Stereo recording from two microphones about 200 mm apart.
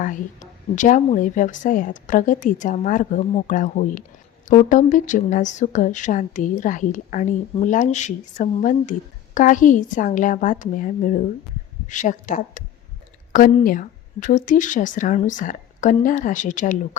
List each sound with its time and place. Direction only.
0.8 s speech: 40° left (ahead or behind)